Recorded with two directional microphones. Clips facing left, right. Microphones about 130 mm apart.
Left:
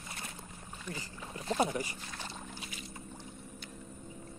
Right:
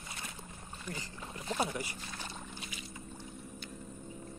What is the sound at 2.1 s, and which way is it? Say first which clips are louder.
Boat: left 2 dB; centre (ahead or behind).